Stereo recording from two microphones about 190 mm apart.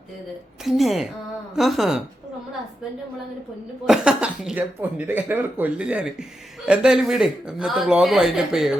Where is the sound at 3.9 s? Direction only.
5° right (ahead or behind).